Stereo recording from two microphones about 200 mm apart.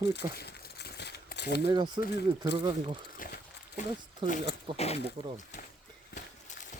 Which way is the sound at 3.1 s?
45° left (ahead or behind).